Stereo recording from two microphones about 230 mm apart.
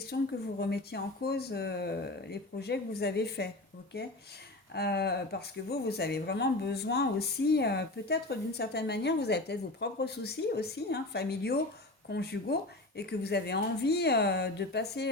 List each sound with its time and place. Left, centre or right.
0.1 s speech: left